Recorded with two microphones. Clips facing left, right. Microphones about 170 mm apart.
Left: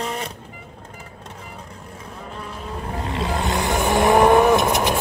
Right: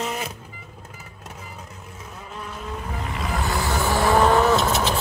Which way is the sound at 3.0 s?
30° left (ahead or behind).